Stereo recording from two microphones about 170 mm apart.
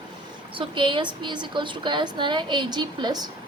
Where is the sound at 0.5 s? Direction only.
30° right (ahead or behind).